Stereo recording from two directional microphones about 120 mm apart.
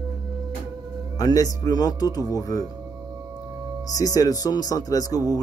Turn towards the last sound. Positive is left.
turn(degrees=30)  # may be behind; listen again after turning